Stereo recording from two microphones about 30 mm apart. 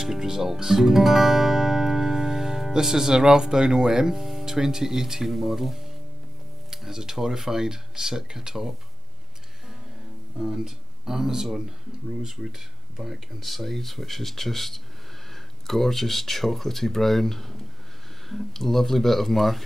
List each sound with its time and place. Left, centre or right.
0.0 s guitar: centre
2.7 s speech: centre
10.4 s speech: centre
13.4 s speech: centre